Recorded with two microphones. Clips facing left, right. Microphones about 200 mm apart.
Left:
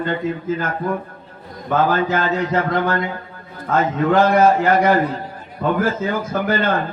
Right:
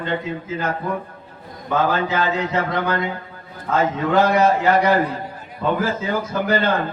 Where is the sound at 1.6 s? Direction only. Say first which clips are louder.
Left 2 dB; 50° left (ahead or behind).